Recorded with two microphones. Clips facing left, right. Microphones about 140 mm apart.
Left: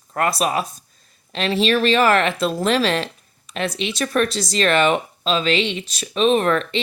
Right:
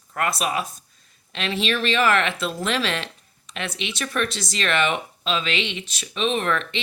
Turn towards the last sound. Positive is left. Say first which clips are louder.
# left 6 dB
turn(degrees=40)  # may be behind; listen again after turning